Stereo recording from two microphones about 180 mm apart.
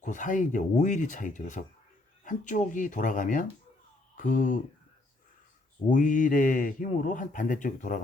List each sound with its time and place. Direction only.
0.0 s speech: 45° left (ahead or behind)
5.9 s speech: 45° left (ahead or behind)